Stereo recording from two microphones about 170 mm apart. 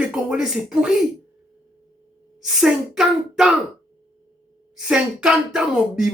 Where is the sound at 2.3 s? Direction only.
5° right (ahead or behind).